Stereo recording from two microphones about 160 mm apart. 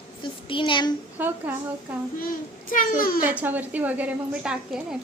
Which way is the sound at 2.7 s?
60° left (ahead or behind).